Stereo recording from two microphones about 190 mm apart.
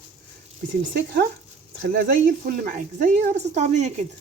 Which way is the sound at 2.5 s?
45° right (ahead or behind).